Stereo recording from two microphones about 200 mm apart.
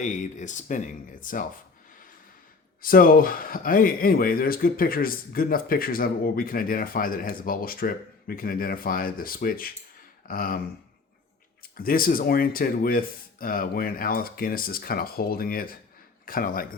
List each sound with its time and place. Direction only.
0.0 s speech: 40° left (ahead or behind)
2.8 s speech: 45° left (ahead or behind)
11.8 s a man's voice: 45° left (ahead or behind)